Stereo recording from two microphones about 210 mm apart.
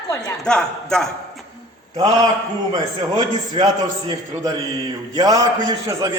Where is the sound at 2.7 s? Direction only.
20° right (ahead or behind).